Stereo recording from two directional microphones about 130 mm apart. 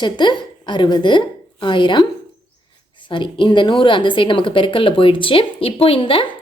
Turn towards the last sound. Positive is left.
turn(degrees=40)  # may be behind; listen again after turning